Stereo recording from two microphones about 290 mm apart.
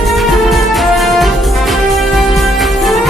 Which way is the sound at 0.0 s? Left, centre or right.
Centre.